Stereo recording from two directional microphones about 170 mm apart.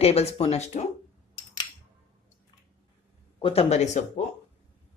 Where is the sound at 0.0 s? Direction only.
35° left (ahead or behind).